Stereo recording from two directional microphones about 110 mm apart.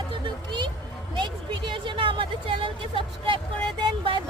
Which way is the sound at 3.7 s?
45° right (ahead or behind).